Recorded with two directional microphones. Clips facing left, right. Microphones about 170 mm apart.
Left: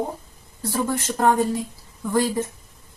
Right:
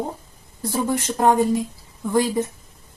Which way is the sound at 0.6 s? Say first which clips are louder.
Right 2 dB; 15° right (ahead or behind).